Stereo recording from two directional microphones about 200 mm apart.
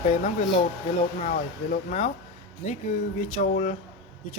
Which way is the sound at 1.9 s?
35° left (ahead or behind).